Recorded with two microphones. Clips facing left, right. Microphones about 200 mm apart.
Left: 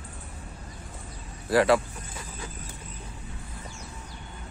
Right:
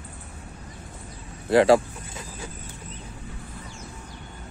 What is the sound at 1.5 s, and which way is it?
Speech, 30° right (ahead or behind).